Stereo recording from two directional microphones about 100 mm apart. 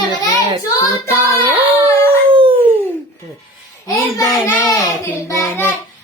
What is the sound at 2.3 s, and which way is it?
Dog, 60° right (ahead or behind).